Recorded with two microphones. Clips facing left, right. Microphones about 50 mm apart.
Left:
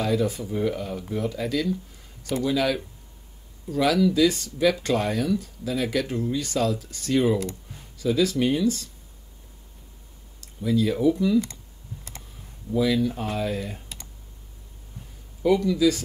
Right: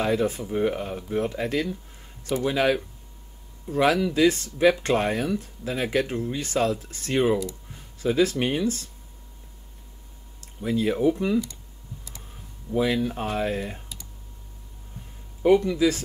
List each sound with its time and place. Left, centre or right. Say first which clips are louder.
0.0 s speech: right 1 dB; right
10.4 s speech: left 1 dB; right
12.7 s speech: left 1 dB; right
15.4 s speech: right 1 dB; right